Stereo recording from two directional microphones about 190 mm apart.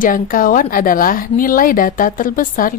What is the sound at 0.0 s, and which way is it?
Speech, 45° left (ahead or behind).